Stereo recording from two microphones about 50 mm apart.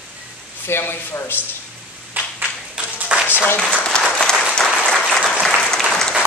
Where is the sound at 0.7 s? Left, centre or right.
Left.